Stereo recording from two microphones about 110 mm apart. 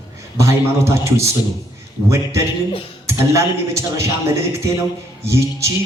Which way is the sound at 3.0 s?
25° right (ahead or behind).